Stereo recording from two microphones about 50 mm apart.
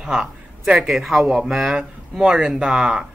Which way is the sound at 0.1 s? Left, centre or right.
Centre.